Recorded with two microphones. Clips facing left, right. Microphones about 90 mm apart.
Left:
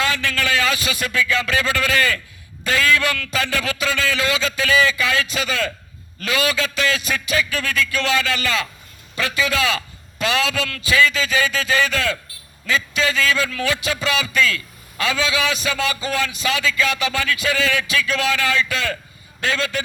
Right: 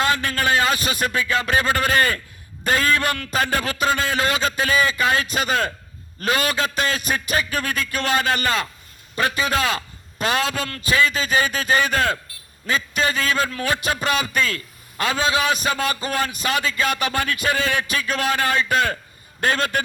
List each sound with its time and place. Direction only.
0.0 s a man's voice: 40° right (ahead or behind)